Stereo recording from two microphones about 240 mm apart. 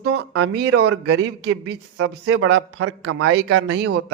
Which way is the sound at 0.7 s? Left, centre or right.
Right.